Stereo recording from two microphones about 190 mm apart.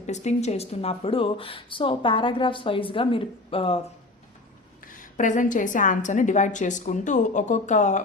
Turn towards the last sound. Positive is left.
turn(degrees=40)  # may be behind; listen again after turning